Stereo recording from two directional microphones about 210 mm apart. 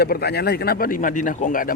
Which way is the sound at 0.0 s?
50° left (ahead or behind).